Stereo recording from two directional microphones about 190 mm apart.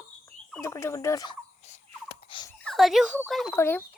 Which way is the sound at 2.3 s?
25° left (ahead or behind).